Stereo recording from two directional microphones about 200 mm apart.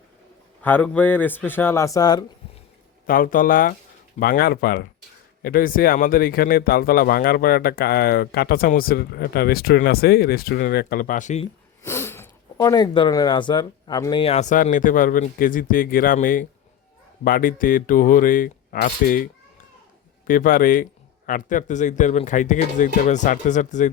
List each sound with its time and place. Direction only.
0.6 s speech: 10° left (ahead or behind)
3.1 s speech: 45° left (ahead or behind)
11.8 s speech: 15° left (ahead or behind); by 23.9 s 40° left (ahead or behind)